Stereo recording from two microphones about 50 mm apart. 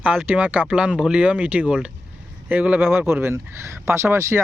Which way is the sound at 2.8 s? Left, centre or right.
Right.